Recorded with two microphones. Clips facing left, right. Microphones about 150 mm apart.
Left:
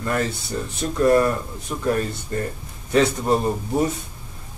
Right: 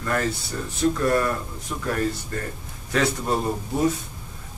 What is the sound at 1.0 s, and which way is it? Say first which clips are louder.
Speech: left 8 dB; 30° left (ahead or behind).